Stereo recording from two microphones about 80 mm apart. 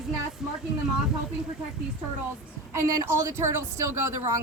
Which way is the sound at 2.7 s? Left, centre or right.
Right.